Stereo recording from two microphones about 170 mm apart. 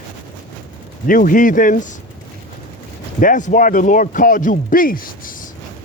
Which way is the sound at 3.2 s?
50° left (ahead or behind).